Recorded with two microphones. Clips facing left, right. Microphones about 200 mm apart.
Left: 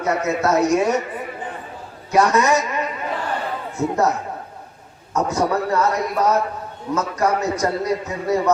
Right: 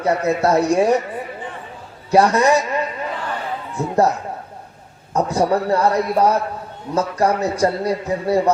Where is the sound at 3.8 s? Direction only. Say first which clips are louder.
Left 3 dB; 35° right (ahead or behind).